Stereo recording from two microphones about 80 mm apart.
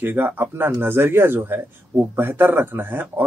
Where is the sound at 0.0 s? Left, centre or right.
Right.